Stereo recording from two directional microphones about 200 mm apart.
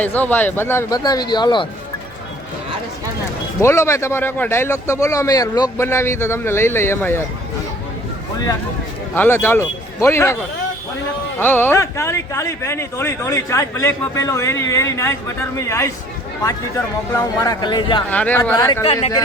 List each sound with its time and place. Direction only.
0.0 s speech: 10° left (ahead or behind)
3.6 s speech: 15° left (ahead or behind)
9.1 s speech: 10° left (ahead or behind)
11.3 s a man's voice: 10° left (ahead or behind)
18.1 s speech: 10° left (ahead or behind)